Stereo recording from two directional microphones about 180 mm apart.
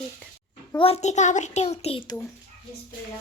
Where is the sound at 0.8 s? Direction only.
35° left (ahead or behind).